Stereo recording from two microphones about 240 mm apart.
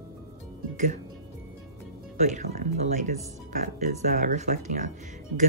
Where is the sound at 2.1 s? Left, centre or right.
Right.